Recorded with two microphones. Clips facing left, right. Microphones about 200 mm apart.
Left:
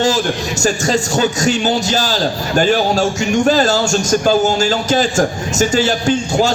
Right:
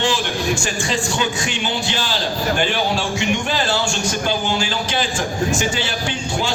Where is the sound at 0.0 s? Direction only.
40° left (ahead or behind).